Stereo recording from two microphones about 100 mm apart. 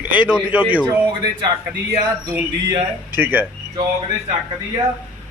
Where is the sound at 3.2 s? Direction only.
20° right (ahead or behind).